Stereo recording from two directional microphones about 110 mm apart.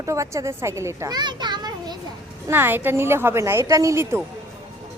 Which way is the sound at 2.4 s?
20° right (ahead or behind).